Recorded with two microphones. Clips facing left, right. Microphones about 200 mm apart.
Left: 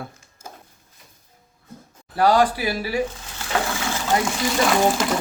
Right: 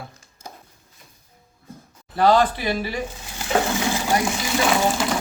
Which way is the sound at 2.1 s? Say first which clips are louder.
Even; 10° left (ahead or behind).